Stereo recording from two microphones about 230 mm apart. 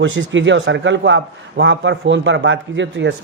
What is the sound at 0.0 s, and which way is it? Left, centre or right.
Speech, right.